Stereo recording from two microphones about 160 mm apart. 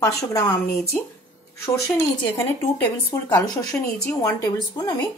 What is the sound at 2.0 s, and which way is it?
Speech, 20° left (ahead or behind).